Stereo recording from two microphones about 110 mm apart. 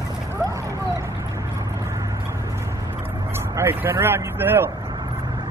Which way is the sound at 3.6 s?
20° right (ahead or behind).